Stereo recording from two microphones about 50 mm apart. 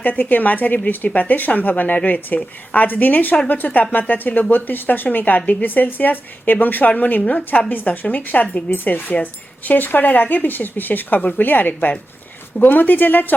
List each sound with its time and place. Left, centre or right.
0.0 s a woman's voice: left
7.7 s speech: left